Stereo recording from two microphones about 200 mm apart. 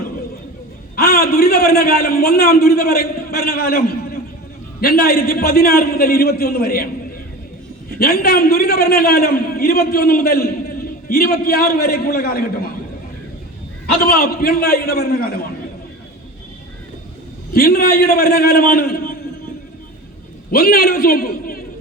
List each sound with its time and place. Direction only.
0.9 s a man's voice: 50° left (ahead or behind)
13.8 s a man's voice: 50° left (ahead or behind)
17.5 s a man's voice: 50° left (ahead or behind)
20.5 s a man's voice: 45° left (ahead or behind)